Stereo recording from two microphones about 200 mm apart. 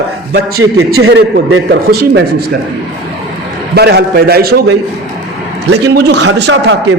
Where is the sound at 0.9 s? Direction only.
85° right.